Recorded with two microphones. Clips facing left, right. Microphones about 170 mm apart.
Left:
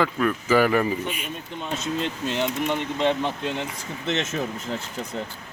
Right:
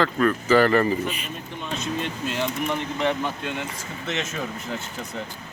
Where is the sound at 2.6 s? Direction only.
25° left (ahead or behind).